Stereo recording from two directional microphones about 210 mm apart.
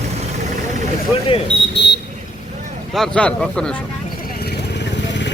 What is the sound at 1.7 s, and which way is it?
Vehicle, 55° left (ahead or behind).